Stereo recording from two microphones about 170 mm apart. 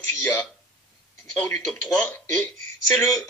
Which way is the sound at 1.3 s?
5° left (ahead or behind).